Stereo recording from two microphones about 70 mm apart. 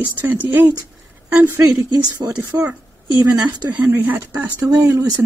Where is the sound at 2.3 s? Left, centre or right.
Right.